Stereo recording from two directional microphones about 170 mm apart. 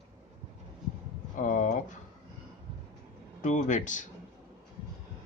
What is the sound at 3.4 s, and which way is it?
Speech, 45° left (ahead or behind).